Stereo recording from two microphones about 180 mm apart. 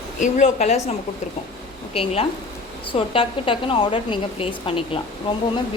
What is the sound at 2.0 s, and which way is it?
A woman's voice, 35° left (ahead or behind).